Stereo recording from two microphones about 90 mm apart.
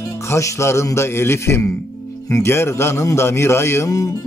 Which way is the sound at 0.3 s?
30° left (ahead or behind).